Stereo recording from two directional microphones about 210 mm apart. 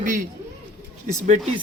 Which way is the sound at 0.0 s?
40° right (ahead or behind).